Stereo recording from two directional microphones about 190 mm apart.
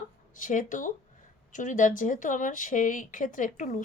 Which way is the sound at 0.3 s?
45° left (ahead or behind).